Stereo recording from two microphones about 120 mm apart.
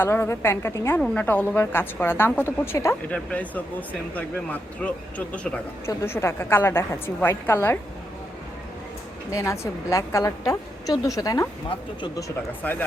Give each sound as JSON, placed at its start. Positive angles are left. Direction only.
{"t": 0.0, "sound": "a woman's voice", "side_deg": 20}
{"t": 0.9, "sound": "speech", "side_deg": 10}
{"t": 5.8, "sound": "a woman's voice", "side_deg": 25}
{"t": 9.3, "sound": "a woman's voice", "side_deg": 25}
{"t": 12.6, "sound": "speech", "side_deg": 15}